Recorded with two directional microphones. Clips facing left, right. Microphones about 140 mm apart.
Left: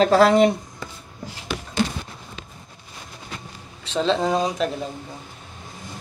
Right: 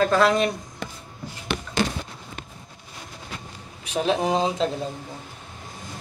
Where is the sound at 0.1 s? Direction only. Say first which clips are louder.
Left 5 dB; 30° left (ahead or behind).